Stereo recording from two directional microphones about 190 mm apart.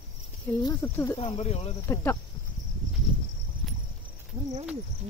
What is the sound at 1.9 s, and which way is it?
Speech, 15° left (ahead or behind).